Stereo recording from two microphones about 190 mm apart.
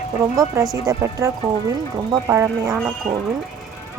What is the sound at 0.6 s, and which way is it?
Speech, 15° right (ahead or behind).